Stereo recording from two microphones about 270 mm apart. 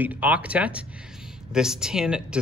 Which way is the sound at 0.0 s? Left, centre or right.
Centre.